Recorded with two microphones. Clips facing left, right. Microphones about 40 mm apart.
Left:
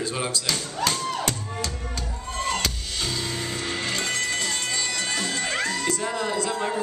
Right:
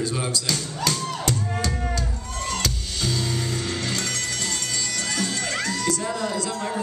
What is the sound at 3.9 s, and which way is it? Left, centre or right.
Music, left.